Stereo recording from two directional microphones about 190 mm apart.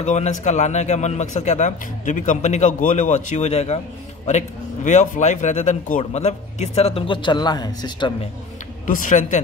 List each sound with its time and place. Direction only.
0.0 s speech: 40° left (ahead or behind); by 8.3 s 25° left (ahead or behind)
8.8 s speech: 45° left (ahead or behind)